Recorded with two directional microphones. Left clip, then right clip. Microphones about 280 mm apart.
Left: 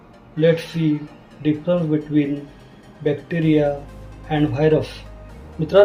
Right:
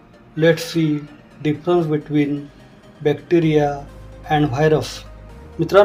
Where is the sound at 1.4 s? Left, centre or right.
Right.